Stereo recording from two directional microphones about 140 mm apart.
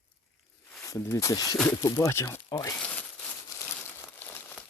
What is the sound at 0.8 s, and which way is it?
Speech, 20° left (ahead or behind).